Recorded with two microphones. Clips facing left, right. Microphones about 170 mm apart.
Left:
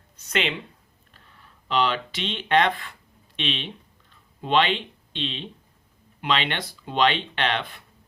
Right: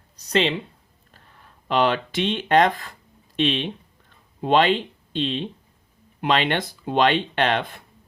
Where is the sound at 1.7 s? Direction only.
50° right (ahead or behind).